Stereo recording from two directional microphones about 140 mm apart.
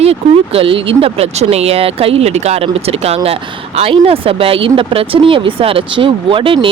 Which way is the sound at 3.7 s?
45° right (ahead or behind).